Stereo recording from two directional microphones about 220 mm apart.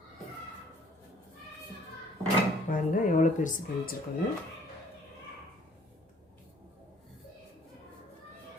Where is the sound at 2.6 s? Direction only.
35° left (ahead or behind).